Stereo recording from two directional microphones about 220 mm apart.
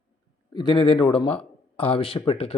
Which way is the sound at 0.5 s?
20° left (ahead or behind).